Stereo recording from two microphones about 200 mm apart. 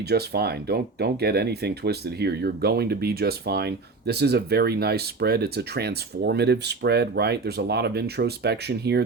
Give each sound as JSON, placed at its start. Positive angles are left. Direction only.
{"t": 0.1, "sound": "speech", "side_deg": -55}